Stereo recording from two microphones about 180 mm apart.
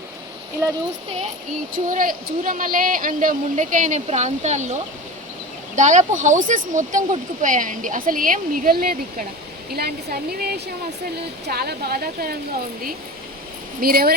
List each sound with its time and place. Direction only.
1.7 s speech: 50° right (ahead or behind)
13.8 s speech: 55° right (ahead or behind)